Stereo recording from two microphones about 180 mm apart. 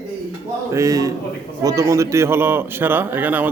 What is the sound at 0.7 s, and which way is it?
A man's voice, 20° right (ahead or behind).